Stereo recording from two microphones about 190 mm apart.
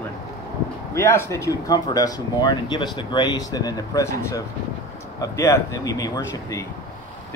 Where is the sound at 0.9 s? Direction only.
15° left (ahead or behind).